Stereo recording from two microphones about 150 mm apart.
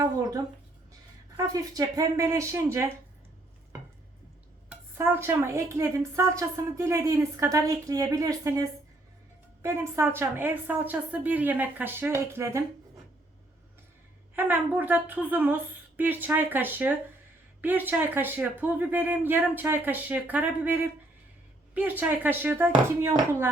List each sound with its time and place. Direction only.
1.4 s a woman's voice: 25° right (ahead or behind)
4.7 s a woman's voice: 15° right (ahead or behind)
14.3 s speech: 10° right (ahead or behind)
21.8 s speech: 10° right (ahead or behind)